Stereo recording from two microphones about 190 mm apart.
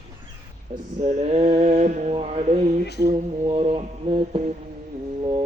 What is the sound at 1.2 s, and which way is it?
Mantra, 35° right (ahead or behind).